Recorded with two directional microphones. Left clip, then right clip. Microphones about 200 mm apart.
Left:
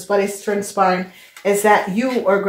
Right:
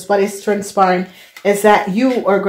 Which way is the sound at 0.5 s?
55° right (ahead or behind).